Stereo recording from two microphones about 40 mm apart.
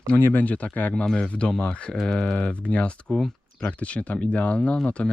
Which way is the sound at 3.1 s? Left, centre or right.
Centre.